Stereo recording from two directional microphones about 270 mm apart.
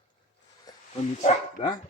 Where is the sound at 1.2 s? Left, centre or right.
Centre.